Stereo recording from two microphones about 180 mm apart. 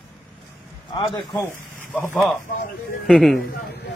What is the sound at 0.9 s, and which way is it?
Speech, 25° left (ahead or behind).